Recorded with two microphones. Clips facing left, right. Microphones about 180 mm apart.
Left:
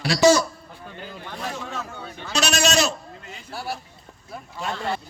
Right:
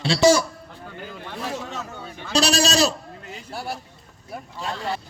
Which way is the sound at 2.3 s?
35° right (ahead or behind).